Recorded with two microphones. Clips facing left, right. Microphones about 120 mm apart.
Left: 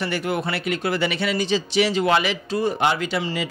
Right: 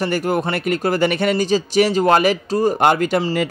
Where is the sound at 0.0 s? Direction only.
40° right (ahead or behind).